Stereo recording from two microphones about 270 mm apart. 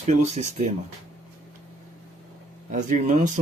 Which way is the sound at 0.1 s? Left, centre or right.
Right.